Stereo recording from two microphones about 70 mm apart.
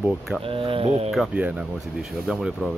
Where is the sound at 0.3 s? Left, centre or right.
Centre.